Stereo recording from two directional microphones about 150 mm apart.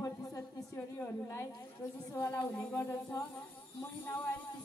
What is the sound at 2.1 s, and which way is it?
Speech, 20° left (ahead or behind).